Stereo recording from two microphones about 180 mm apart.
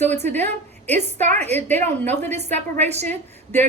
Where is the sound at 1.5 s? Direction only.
10° left (ahead or behind).